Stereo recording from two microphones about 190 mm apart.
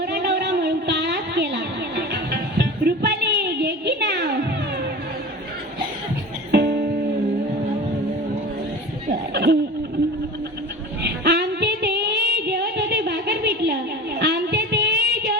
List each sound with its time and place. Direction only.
0.0 s a sound: 60° right (ahead or behind)
2.3 s music: 55° right (ahead or behind)
6.5 s music: 60° right (ahead or behind)
9.3 s laughter: 55° right (ahead or behind)
11.0 s female singing: 60° right (ahead or behind)